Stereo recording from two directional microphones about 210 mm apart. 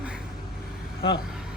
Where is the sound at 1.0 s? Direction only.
50° left (ahead or behind).